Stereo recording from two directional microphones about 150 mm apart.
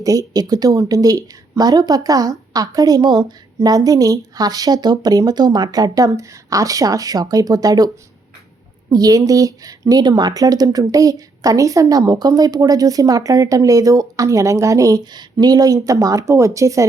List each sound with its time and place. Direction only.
0.0 s speech: 25° right (ahead or behind)
8.9 s speech: 25° right (ahead or behind)